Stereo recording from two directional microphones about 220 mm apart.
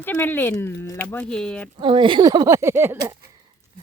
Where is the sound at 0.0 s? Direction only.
10° left (ahead or behind).